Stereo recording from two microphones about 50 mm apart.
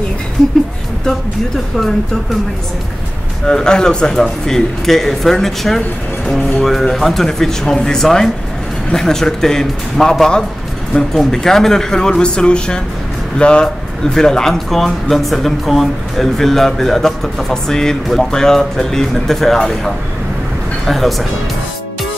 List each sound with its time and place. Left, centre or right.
3.4 s speech: centre